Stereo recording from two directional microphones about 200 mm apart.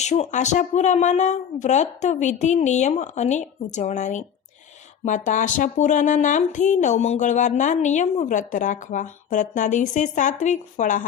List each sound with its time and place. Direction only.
0.0 s speech: 35° left (ahead or behind)